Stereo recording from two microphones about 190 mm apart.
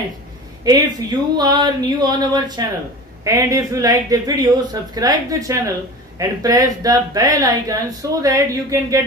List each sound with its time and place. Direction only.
0.7 s a woman's voice: 20° right (ahead or behind)